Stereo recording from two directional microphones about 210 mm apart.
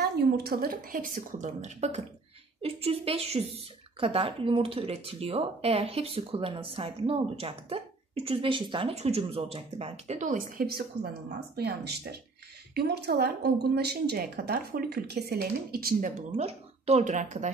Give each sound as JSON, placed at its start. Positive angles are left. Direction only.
{"t": 0.0, "sound": "a woman's voice", "side_deg": -45}